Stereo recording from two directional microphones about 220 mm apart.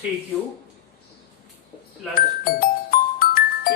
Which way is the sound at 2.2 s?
40° left (ahead or behind).